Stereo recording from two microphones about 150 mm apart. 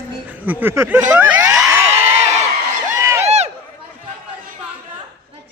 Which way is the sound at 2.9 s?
20° right (ahead or behind).